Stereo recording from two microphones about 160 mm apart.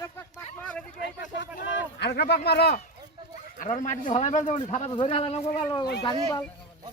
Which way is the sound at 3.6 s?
50° left (ahead or behind).